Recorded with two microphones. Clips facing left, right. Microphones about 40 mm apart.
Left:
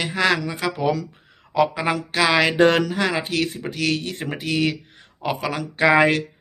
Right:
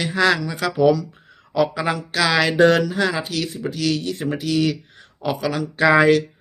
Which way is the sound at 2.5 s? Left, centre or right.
Left.